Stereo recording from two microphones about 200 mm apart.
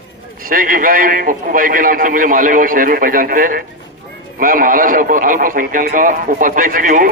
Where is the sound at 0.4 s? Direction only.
45° right (ahead or behind).